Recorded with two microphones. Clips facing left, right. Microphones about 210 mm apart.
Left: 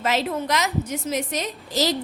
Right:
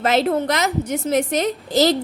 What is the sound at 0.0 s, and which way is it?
A woman's voice, 65° right (ahead or behind).